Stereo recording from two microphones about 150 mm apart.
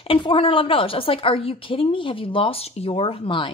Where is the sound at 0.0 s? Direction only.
35° left (ahead or behind).